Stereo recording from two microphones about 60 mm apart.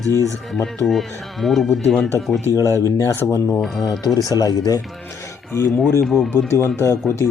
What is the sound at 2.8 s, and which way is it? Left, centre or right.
Speech, left.